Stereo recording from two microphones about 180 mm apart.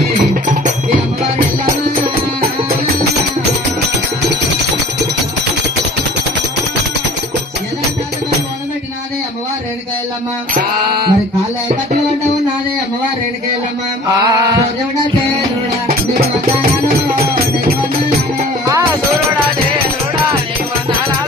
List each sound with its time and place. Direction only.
0.4 s music: 45° right (ahead or behind)
10.5 s mantra: 55° right (ahead or behind)
14.3 s a sound: 20° right (ahead or behind)
18.7 s music: 15° right (ahead or behind)